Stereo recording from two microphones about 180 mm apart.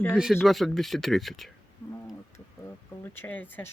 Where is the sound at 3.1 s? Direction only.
10° left (ahead or behind).